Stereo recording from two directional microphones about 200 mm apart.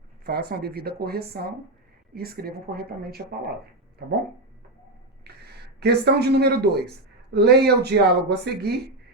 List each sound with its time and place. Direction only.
0.3 s speech: 50° right (ahead or behind)
5.4 s speech: 55° right (ahead or behind)